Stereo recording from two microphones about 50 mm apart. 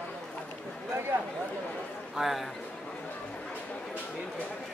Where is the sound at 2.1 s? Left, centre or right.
Centre.